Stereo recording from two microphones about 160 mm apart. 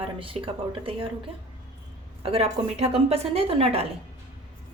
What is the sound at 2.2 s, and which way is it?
A woman's voice, 40° right (ahead or behind).